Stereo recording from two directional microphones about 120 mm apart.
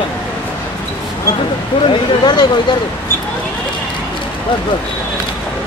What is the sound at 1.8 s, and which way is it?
Speech, 40° left (ahead or behind).